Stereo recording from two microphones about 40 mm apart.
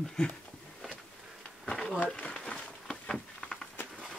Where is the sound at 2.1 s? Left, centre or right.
Left.